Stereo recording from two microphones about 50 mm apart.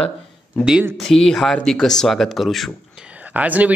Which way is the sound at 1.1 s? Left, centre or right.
Centre.